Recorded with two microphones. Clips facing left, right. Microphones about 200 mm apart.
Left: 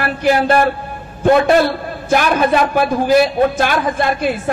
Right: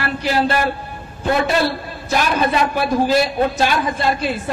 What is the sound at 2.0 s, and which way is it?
A man's voice, 50° left (ahead or behind).